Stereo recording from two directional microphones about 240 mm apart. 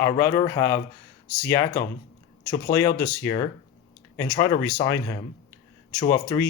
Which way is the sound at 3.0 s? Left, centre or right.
Centre.